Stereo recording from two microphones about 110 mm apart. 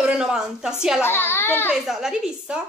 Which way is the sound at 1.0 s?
20° left (ahead or behind).